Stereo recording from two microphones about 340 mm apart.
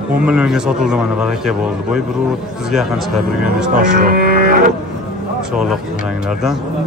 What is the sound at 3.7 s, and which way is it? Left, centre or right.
Livestock, right.